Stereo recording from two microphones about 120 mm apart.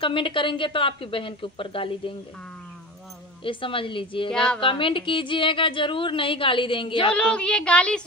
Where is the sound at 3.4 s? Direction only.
45° left (ahead or behind).